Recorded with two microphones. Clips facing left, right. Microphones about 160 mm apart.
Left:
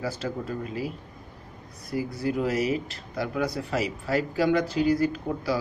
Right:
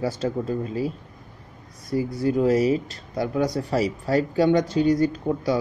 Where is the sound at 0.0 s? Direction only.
30° right (ahead or behind).